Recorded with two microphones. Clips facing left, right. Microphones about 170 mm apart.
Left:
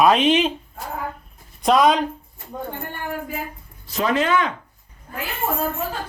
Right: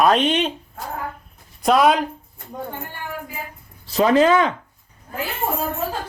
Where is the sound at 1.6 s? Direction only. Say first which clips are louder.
Even; 5° right (ahead or behind).